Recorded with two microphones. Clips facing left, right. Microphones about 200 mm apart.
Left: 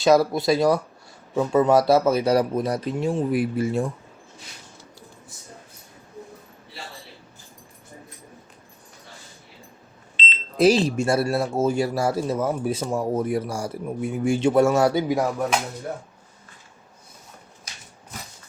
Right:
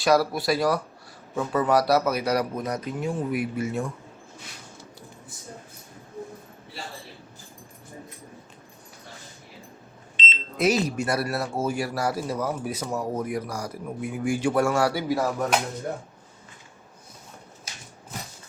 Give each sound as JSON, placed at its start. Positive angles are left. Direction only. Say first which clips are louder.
{"t": 0.0, "sound": "speech", "louder": "left 4 dB", "side_deg": 20}
{"t": 10.6, "sound": "speech", "louder": "left 5 dB", "side_deg": 30}